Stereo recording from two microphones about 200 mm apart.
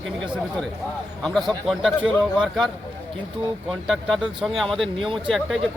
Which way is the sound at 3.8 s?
Centre (ahead or behind).